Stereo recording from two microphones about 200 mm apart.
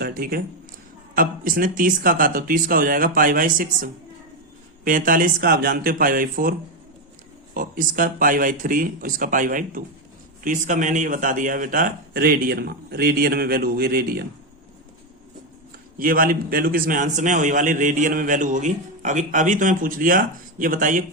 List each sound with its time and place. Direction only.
0.0 s a man's voice: 45° right (ahead or behind)
4.9 s a man's voice: 45° right (ahead or behind)
16.0 s a man's voice: 45° right (ahead or behind)